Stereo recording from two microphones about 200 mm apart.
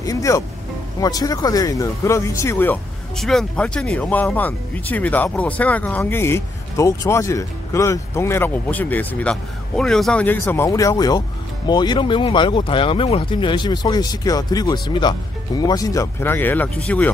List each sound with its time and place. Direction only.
0.0 s music: 15° left (ahead or behind)
1.0 s speech: 20° left (ahead or behind)